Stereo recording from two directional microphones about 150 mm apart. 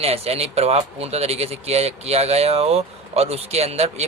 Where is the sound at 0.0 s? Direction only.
45° right (ahead or behind).